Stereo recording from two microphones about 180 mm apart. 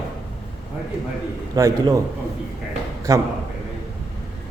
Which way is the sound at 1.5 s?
20° right (ahead or behind).